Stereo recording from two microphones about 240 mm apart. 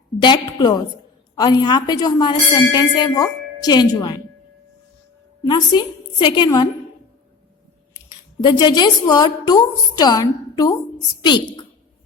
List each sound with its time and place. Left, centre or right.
0.2 s a woman's voice: centre
5.4 s a woman's voice: centre
7.9 s a woman's voice: centre